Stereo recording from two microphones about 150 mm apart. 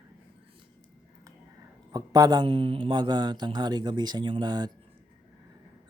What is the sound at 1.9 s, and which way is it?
Speech, 25° right (ahead or behind).